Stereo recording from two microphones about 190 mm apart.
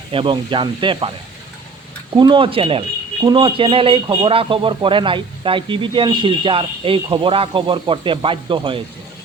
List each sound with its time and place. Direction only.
0.1 s a man's voice: 25° right (ahead or behind)
2.1 s a man's voice: 25° right (ahead or behind)